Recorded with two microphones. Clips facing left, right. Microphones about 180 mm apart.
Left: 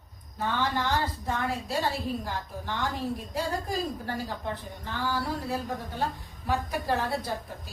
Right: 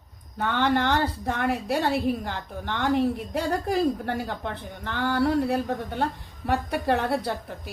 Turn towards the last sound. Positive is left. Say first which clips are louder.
# right 4 dB
turn(degrees=-60)  # may be behind; listen again after turning